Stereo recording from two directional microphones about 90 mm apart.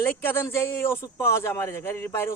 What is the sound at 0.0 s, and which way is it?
A man's voice, 25° left (ahead or behind).